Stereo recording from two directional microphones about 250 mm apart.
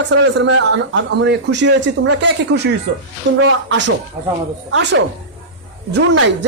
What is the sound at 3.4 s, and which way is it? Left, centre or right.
Speech, right.